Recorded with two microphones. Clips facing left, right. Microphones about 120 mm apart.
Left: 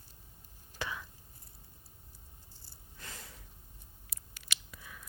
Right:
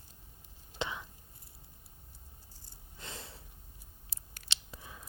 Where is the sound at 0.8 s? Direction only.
20° right (ahead or behind).